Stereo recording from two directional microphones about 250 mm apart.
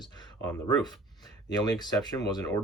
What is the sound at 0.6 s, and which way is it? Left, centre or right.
Speech, centre.